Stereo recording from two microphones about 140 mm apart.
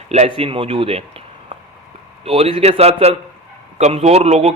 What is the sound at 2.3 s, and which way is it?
A man's voice, 45° right (ahead or behind).